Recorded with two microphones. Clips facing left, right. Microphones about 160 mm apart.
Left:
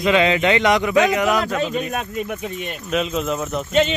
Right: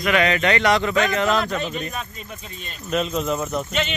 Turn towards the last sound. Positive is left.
turn(degrees=0)  # may be behind; listen again after turning